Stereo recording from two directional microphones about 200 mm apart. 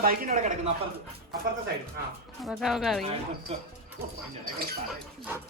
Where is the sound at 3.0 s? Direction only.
30° right (ahead or behind).